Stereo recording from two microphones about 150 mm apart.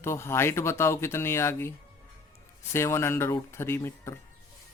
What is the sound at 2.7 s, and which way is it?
Speech, 15° left (ahead or behind).